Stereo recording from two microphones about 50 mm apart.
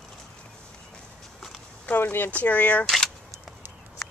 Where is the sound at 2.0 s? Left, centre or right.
Left.